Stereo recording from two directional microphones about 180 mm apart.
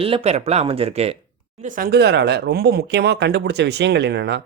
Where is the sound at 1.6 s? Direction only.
50° right (ahead or behind); by 4.4 s 70° right (ahead or behind).